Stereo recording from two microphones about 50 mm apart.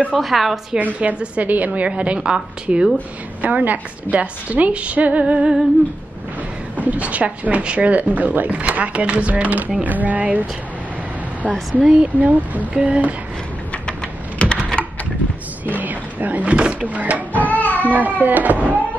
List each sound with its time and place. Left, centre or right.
0.1 s speech: centre
0.7 s a woman's voice: right
3.4 s speech: right
6.8 s a woman's voice: right
11.7 s speech: right
14.4 s computer keyboard: centre
15.6 s a sound: right
16.8 s a woman's voice: right
17.5 s child singing: left
17.8 s a woman's voice: right